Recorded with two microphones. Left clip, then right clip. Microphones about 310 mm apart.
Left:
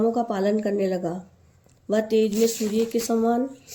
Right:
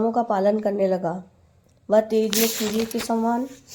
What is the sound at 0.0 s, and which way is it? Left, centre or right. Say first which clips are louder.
Speech: right 3 dB; right.